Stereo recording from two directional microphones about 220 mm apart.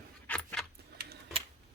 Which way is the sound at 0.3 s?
5° left (ahead or behind).